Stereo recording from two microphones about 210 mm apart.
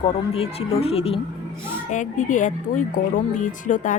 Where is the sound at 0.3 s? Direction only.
30° left (ahead or behind).